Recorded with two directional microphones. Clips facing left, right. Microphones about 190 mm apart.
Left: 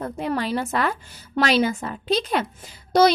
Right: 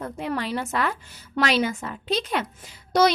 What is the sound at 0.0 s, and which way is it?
A woman's voice, 35° left (ahead or behind).